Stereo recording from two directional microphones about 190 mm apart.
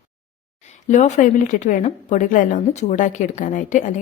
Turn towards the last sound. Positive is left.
turn(degrees=40)  # may be behind; listen again after turning